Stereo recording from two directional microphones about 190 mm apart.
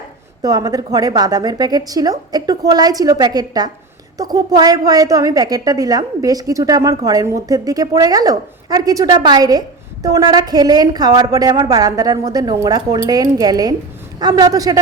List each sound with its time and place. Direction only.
0.4 s speech: 20° right (ahead or behind)